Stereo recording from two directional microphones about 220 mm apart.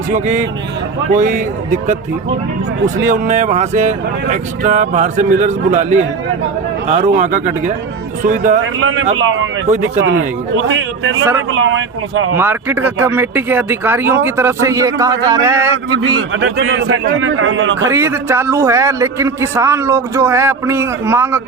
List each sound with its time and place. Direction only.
0.1 s speech: 35° right (ahead or behind)
2.8 s speech: 35° right (ahead or behind)
8.6 s a man's voice: 65° right (ahead or behind)
9.6 s speech: 30° right (ahead or behind)
10.0 s a man's voice: 60° right (ahead or behind)
12.4 s a man's voice: 10° right (ahead or behind)
16.1 s a man's voice: 55° right (ahead or behind)
17.8 s a man's voice: 10° right (ahead or behind)